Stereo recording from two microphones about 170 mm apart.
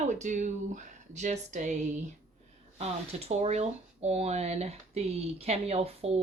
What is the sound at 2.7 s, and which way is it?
Speech, 40° right (ahead or behind).